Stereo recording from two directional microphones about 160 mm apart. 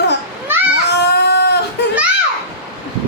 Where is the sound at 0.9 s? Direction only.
90° left.